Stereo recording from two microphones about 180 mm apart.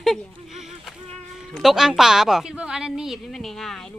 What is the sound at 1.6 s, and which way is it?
A woman's voice, centre (ahead or behind).